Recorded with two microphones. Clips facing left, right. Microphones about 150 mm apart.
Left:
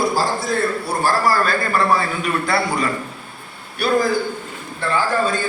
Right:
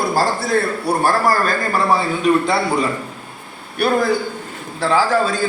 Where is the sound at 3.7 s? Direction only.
60° right (ahead or behind).